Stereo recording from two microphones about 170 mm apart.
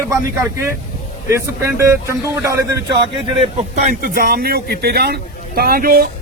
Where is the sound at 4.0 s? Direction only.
55° right (ahead or behind).